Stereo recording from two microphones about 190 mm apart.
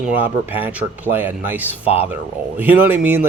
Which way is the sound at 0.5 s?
10° right (ahead or behind).